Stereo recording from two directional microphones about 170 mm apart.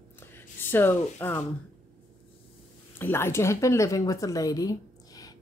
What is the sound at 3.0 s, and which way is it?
A woman's voice, 15° left (ahead or behind).